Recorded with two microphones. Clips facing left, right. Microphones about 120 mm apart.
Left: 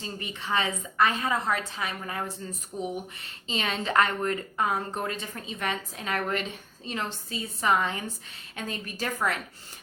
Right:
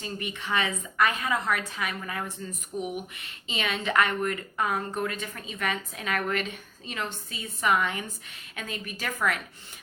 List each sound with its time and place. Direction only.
0.0 s a woman's voice: 30° left (ahead or behind)